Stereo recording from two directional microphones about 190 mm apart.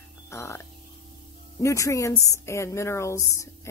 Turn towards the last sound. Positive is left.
turn(degrees=15)  # may be behind; listen again after turning